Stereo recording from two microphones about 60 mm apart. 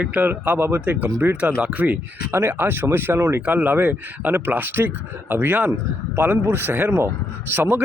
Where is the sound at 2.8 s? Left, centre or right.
Right.